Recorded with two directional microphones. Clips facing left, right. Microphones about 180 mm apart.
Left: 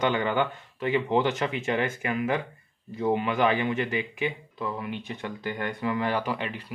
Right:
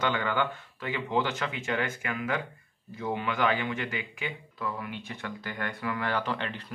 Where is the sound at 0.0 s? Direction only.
20° left (ahead or behind).